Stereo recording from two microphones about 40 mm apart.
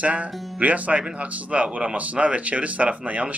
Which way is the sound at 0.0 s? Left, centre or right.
Right.